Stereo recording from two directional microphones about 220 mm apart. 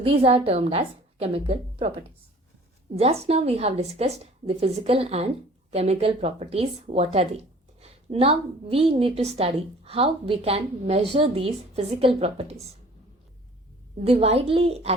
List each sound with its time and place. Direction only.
0.0 s speech: 25° right (ahead or behind)
14.0 s speech: 25° right (ahead or behind)